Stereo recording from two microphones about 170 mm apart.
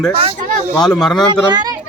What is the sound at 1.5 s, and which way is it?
Speech, 25° right (ahead or behind).